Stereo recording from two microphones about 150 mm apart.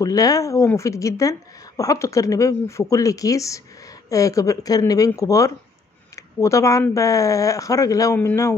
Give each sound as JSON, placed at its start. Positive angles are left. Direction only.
{"t": 0.0, "sound": "speech", "side_deg": 25}